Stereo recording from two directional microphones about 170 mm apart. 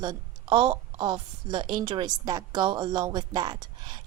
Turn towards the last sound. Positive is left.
turn(degrees=-25)  # may be behind; listen again after turning